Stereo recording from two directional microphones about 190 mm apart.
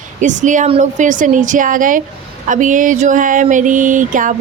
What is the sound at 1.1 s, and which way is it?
A woman's voice, 45° right (ahead or behind).